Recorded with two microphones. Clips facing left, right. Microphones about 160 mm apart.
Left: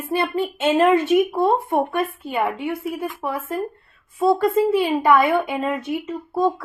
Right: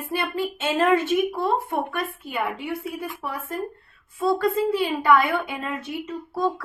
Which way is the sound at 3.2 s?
25° left (ahead or behind).